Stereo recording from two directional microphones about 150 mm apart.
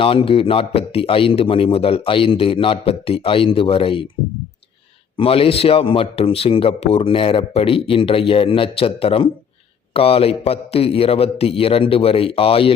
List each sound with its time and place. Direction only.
0.0 s a man's voice: 35° left (ahead or behind)
5.1 s a man's voice: 40° left (ahead or behind)